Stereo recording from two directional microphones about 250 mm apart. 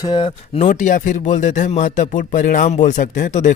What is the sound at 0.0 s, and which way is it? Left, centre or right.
Speech, centre.